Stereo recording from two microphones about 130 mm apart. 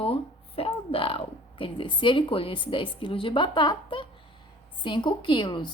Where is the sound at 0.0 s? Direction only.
45° left (ahead or behind).